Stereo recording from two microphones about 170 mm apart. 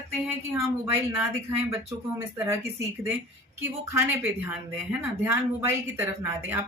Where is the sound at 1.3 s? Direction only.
15° right (ahead or behind).